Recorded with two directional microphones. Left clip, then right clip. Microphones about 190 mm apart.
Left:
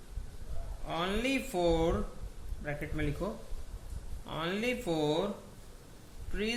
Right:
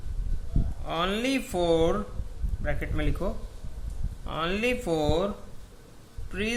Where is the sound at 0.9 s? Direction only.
25° right (ahead or behind).